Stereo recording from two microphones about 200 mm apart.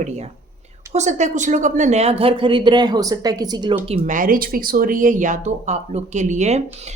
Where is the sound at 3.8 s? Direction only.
30° right (ahead or behind).